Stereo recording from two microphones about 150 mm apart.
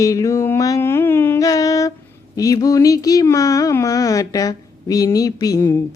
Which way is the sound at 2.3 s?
25° left (ahead or behind).